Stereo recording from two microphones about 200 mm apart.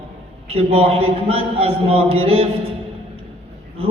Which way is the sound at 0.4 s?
30° right (ahead or behind).